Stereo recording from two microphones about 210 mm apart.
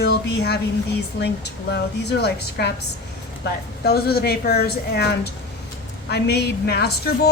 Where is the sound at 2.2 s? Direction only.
50° left (ahead or behind).